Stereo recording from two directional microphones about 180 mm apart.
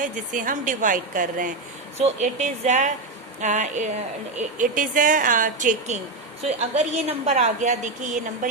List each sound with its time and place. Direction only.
0.0 s a woman's voice: 45° right (ahead or behind)